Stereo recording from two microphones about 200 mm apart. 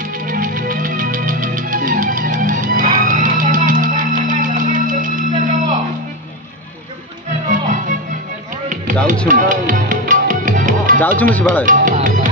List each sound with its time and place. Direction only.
0.3 s music: 45° right (ahead or behind)
7.4 s music: 40° right (ahead or behind)
9.3 s music: 40° right (ahead or behind)
11.0 s speech: 10° left (ahead or behind)
11.6 s music: 40° right (ahead or behind)